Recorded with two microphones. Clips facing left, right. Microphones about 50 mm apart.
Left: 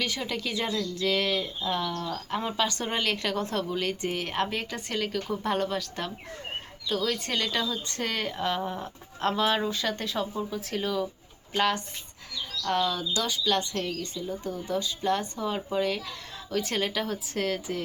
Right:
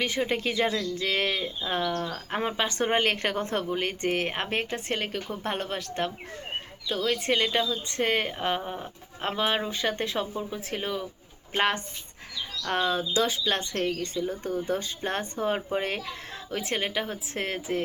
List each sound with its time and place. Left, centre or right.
0.0 s speech: right
16.0 s speech: right